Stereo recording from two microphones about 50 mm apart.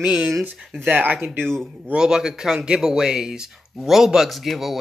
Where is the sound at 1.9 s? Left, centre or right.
Centre.